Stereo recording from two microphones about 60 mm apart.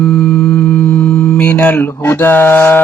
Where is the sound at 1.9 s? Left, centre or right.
Left.